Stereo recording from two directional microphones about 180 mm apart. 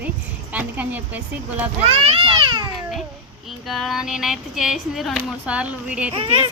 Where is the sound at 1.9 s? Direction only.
30° right (ahead or behind).